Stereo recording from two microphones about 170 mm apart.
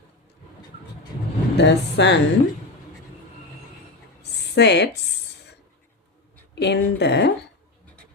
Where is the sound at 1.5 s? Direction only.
90° left.